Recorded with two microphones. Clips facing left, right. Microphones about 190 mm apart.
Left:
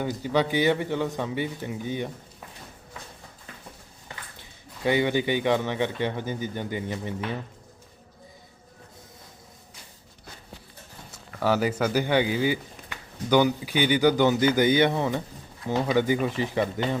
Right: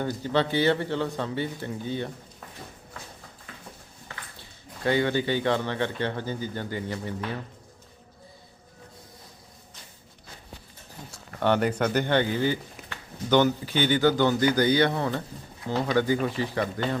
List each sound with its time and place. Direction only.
0.0 s speech: 10° left (ahead or behind)
4.1 s speech: 15° left (ahead or behind)
11.3 s speech: 5° left (ahead or behind)